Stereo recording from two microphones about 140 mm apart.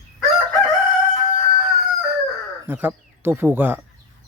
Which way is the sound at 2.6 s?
15° right (ahead or behind).